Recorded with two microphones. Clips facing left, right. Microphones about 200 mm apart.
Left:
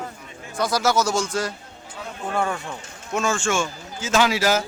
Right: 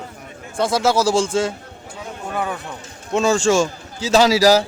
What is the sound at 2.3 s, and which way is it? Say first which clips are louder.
Speech: even; 5° right (ahead or behind).